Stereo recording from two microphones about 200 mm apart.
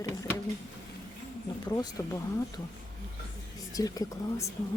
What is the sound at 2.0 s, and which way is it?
Speech, 15° left (ahead or behind).